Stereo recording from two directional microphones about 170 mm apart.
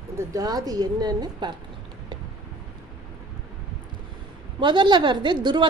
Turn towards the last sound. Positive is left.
turn(degrees=-25)  # may be behind; listen again after turning